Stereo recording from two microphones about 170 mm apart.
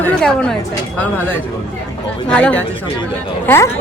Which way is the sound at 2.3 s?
5° left (ahead or behind).